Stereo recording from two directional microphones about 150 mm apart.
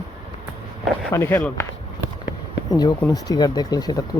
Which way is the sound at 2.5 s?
25° left (ahead or behind).